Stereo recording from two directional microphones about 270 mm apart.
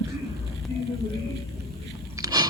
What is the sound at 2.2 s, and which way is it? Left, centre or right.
Biting, centre.